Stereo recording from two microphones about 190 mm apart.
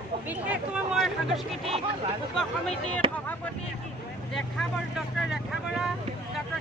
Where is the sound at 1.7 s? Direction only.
30° right (ahead or behind).